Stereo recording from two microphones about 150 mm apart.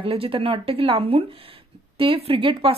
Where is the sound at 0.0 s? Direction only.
40° right (ahead or behind).